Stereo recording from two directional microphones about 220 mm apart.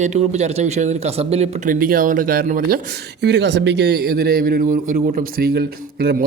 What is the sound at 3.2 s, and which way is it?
Speech, 50° right (ahead or behind).